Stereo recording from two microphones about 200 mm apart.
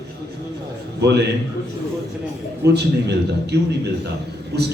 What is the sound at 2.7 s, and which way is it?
A man's voice, 55° right (ahead or behind).